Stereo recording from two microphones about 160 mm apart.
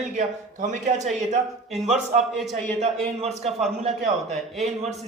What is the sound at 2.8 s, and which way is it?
Speech, 40° right (ahead or behind).